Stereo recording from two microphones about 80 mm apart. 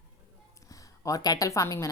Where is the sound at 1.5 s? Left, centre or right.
Left.